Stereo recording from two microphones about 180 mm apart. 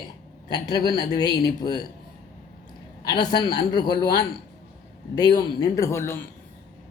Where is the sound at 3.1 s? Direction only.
25° left (ahead or behind).